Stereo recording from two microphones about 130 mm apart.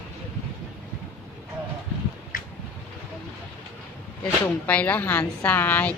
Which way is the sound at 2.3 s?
90° left.